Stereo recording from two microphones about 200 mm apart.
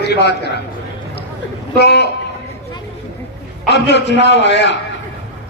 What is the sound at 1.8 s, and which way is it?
Speech, 55° left (ahead or behind).